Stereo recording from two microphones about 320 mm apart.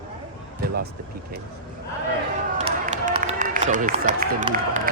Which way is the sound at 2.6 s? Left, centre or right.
Centre.